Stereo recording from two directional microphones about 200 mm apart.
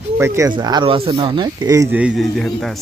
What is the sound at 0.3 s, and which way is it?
Speech, 20° right (ahead or behind).